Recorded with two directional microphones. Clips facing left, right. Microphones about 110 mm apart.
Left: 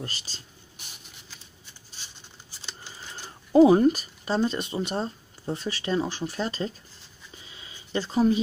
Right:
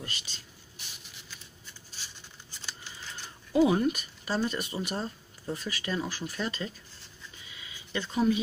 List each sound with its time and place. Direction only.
0.0 s speech: 35° left (ahead or behind)
3.5 s speech: 35° left (ahead or behind)
7.4 s a sound: 30° left (ahead or behind)